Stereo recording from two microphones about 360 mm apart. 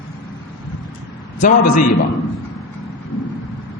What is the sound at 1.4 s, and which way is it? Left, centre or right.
Speech, left.